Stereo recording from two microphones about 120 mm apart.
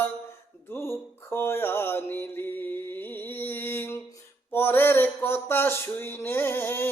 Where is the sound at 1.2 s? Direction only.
20° left (ahead or behind).